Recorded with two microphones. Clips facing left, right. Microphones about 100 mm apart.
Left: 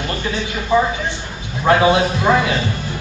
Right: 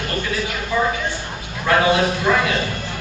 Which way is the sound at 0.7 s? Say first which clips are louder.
Left 4 dB; 20° left (ahead or behind).